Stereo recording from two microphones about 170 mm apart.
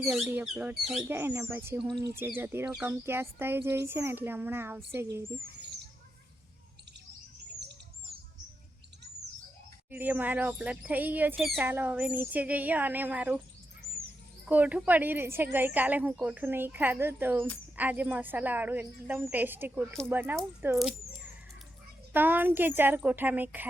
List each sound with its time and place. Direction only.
0.0 s speech: 5° right (ahead or behind)
1.1 s speech: 15° right (ahead or behind)
7.6 s bird: 80° right
9.9 s speech: 10° right (ahead or behind)
11.3 s speech: centre (ahead or behind)
11.6 s speech: 10° right (ahead or behind)
14.4 s speech: 10° right (ahead or behind)
22.1 s speech: 10° right (ahead or behind)